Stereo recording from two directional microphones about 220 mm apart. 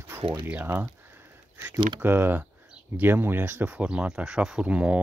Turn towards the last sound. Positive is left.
turn(degrees=-5)  # may be behind; listen again after turning